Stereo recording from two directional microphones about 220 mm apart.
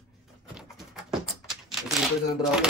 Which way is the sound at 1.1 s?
Centre (ahead or behind).